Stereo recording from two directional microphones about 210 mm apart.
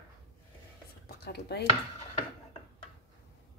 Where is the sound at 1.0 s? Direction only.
50° left (ahead or behind).